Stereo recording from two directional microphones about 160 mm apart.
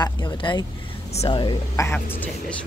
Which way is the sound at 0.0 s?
30° left (ahead or behind).